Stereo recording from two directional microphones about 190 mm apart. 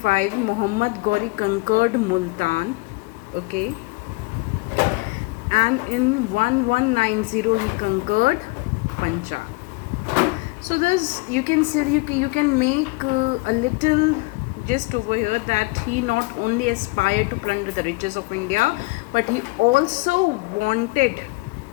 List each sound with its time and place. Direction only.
0.0 s a woman's voice: 40° right (ahead or behind)
5.5 s speech: 40° right (ahead or behind)
10.7 s speech: 40° right (ahead or behind)